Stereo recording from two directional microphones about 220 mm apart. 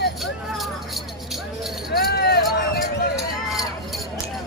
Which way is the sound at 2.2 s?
45° left (ahead or behind).